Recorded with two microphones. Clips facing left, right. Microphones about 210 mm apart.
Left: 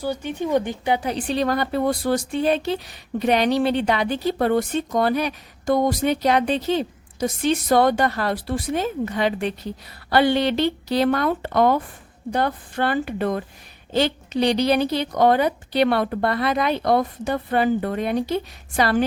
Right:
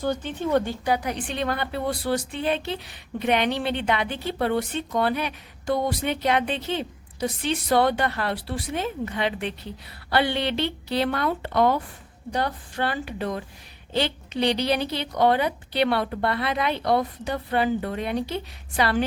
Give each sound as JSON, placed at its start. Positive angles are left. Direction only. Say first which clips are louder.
{"t": 0.0, "sound": "a woman's voice", "louder": "left 1 dB", "side_deg": 10}